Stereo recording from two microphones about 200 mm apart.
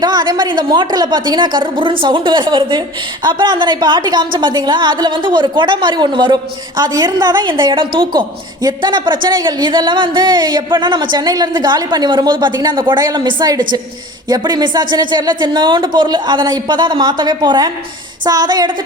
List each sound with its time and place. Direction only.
0.0 s a woman's voice: 20° right (ahead or behind)